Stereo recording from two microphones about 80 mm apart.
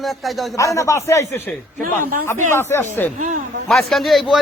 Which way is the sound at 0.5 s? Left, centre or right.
Left.